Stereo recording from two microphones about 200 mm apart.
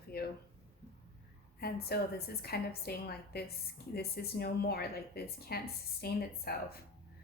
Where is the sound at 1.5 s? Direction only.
50° left (ahead or behind).